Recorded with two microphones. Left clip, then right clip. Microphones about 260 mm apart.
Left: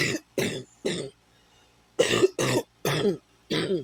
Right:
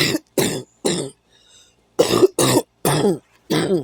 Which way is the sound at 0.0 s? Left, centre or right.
Right.